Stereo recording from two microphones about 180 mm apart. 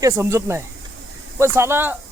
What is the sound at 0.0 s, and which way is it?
Speech, 15° right (ahead or behind).